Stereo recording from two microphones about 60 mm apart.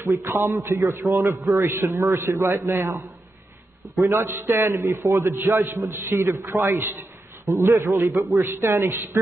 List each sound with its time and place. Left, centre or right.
0.1 s a man's voice: right
1.6 s a man's voice: right
4.0 s a man's voice: right
7.7 s a man's voice: right
8.5 s a man's voice: right